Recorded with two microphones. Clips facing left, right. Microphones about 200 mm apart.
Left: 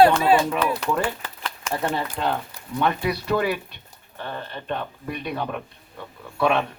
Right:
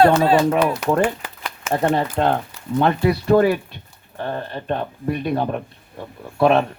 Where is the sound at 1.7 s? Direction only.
50° right (ahead or behind).